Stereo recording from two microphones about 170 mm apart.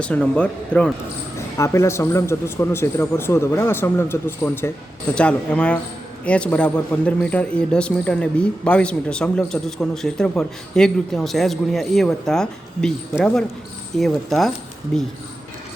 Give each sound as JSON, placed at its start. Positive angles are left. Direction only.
{"t": 0.0, "sound": "a man's voice", "side_deg": 5}
{"t": 1.5, "sound": "a man's voice", "side_deg": 15}